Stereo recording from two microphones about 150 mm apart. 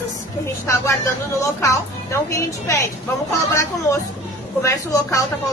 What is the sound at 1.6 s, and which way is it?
A woman's voice, 20° left (ahead or behind).